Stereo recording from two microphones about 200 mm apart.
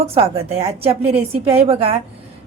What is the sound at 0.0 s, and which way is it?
A woman's voice, 30° right (ahead or behind).